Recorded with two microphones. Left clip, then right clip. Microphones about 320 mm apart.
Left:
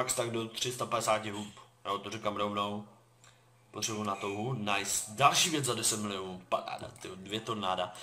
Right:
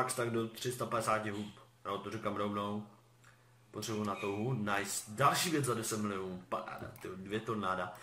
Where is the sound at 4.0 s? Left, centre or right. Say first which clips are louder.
Left 1 dB; centre.